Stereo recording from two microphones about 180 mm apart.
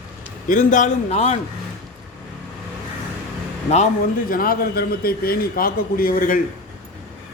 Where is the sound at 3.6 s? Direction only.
40° left (ahead or behind).